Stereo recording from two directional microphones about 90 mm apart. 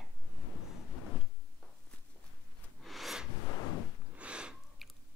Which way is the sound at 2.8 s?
Centre (ahead or behind).